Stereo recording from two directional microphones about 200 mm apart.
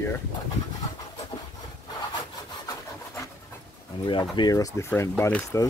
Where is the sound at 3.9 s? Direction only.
25° left (ahead or behind).